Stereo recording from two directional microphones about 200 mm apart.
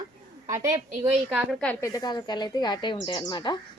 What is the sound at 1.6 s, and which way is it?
Speech, 10° left (ahead or behind).